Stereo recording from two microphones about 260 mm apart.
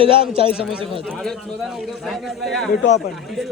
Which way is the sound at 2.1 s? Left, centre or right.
Centre.